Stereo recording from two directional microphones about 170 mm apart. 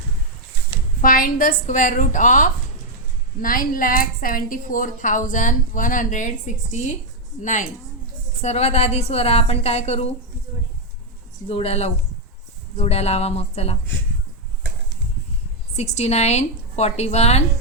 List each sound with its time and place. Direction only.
1.0 s a woman's voice: 55° left (ahead or behind)
8.4 s a woman's voice: 40° left (ahead or behind)
11.4 s a woman's voice: 35° left (ahead or behind)
15.7 s a woman's voice: 40° left (ahead or behind)